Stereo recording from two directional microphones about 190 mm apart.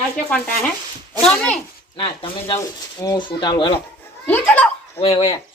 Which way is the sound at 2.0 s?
25° left (ahead or behind).